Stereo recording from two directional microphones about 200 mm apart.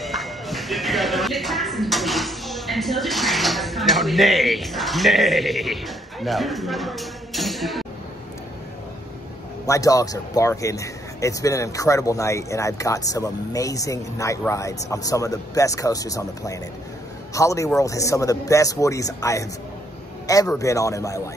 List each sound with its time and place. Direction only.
0.0 s speech: centre (ahead or behind)
9.7 s speech: 15° left (ahead or behind)